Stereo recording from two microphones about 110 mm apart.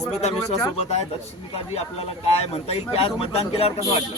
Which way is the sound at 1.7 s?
70° left (ahead or behind).